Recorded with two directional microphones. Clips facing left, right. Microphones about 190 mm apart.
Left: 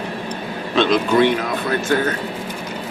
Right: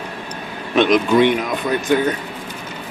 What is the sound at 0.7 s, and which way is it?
A man's voice, 15° right (ahead or behind).